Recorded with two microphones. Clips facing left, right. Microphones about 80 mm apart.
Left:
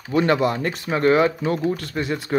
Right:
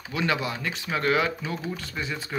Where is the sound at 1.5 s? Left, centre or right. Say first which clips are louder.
Left 9 dB; left.